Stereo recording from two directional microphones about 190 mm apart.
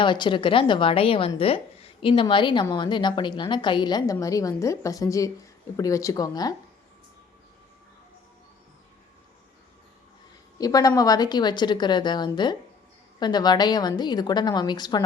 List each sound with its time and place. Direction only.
0.0 s a woman's voice: 25° left (ahead or behind)
10.6 s a woman's voice: 20° left (ahead or behind)